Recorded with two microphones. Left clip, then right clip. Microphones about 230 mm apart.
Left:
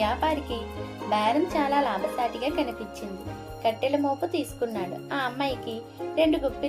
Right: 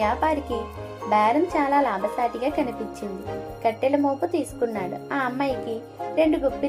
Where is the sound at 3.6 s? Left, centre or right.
Centre.